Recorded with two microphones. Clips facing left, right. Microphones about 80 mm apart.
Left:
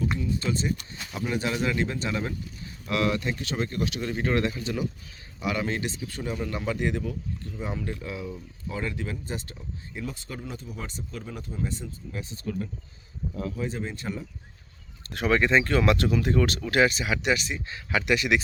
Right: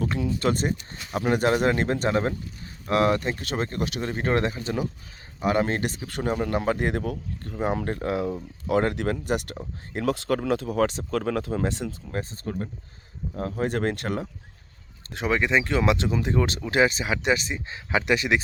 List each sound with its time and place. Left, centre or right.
0.2 s speech: right
12.1 s speech: right
15.1 s speech: centre